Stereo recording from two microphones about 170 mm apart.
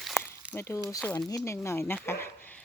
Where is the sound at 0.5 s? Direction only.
15° left (ahead or behind).